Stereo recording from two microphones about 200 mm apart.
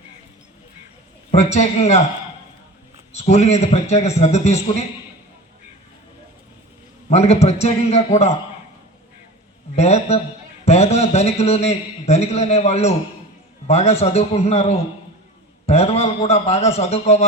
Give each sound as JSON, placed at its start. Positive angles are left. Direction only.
{"t": 1.3, "sound": "a man's voice", "side_deg": 35}
{"t": 3.1, "sound": "a man's voice", "side_deg": 35}
{"t": 7.1, "sound": "a man's voice", "side_deg": 30}
{"t": 9.7, "sound": "a man's voice", "side_deg": 30}